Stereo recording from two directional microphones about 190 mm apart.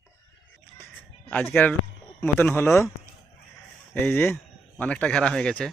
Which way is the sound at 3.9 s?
10° left (ahead or behind).